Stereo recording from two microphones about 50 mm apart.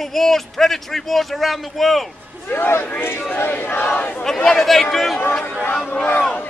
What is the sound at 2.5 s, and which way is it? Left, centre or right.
A man's voice, left.